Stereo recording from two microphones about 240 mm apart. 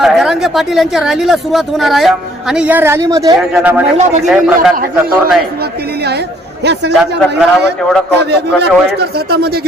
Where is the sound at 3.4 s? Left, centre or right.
Centre.